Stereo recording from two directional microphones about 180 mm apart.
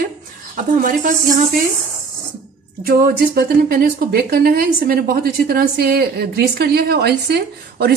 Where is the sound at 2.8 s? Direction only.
55° right (ahead or behind).